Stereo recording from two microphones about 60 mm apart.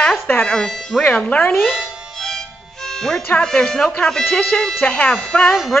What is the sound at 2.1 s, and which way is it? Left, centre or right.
Music, centre.